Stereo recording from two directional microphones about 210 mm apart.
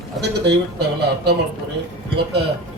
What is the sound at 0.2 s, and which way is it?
Speech, 50° right (ahead or behind).